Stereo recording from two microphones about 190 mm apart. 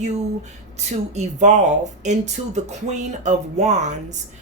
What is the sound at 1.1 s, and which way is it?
Speech, 40° right (ahead or behind).